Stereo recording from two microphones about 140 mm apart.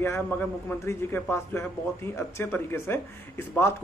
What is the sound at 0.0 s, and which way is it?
A man's voice, 15° left (ahead or behind).